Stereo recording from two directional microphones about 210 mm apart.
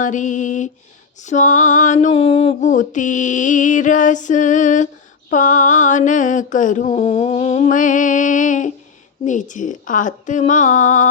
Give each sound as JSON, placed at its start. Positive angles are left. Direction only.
{"t": 0.0, "sound": "mantra", "side_deg": 35}